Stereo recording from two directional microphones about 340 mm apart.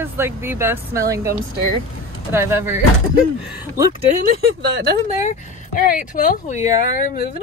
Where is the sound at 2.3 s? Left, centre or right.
Centre.